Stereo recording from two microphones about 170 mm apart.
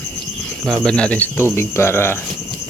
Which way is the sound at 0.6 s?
Centre (ahead or behind).